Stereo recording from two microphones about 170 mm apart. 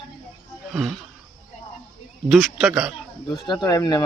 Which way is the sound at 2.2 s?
Centre (ahead or behind).